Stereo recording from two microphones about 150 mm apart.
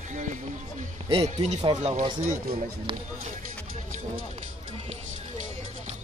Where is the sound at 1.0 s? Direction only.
40° right (ahead or behind).